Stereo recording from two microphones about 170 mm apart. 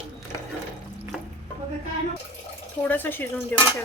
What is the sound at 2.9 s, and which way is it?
Speech, 10° left (ahead or behind).